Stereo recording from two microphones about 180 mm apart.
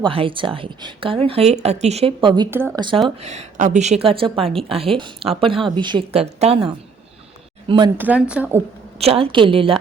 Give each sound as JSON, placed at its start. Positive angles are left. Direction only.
{"t": 0.0, "sound": "speech", "side_deg": -30}
{"t": 2.5, "sound": "speech", "side_deg": -10}
{"t": 3.2, "sound": "speech", "side_deg": -40}
{"t": 7.9, "sound": "speech", "side_deg": -10}
{"t": 9.0, "sound": "speech", "side_deg": -35}